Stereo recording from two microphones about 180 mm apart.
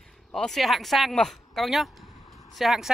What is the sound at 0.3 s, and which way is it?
Speech, centre (ahead or behind).